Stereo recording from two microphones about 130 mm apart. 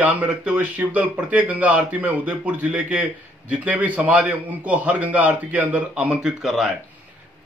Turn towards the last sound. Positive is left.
turn(degrees=-5)  # may be behind; listen again after turning